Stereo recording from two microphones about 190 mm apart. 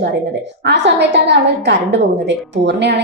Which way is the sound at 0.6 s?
65° right (ahead or behind).